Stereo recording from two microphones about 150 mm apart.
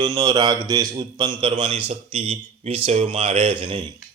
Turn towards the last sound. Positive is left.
turn(degrees=-35)  # may be behind; listen again after turning